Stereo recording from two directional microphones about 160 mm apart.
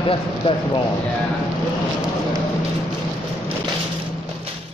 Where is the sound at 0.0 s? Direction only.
35° left (ahead or behind).